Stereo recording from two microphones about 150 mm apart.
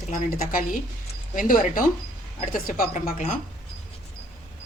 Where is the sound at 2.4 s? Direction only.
55° left (ahead or behind).